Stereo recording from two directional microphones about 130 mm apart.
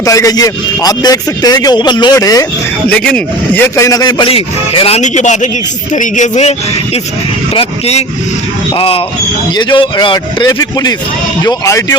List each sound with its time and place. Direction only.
0.0 s a man's voice: 25° left (ahead or behind)
3.0 s speech: 10° left (ahead or behind)
3.8 s speech: 30° left (ahead or behind)
4.3 s speech: 45° left (ahead or behind)
4.9 s a man's voice: 65° left (ahead or behind)
7.5 s a man's voice: 50° left (ahead or behind); by 11.9 s 25° left (ahead or behind)